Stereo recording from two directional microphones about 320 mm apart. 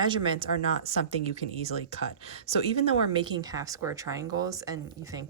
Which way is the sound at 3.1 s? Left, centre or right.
Centre.